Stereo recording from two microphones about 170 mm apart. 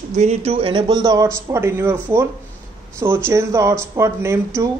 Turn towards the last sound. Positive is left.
turn(degrees=-15)  # may be behind; listen again after turning